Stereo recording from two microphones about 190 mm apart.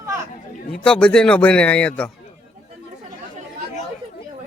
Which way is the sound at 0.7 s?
5° left (ahead or behind).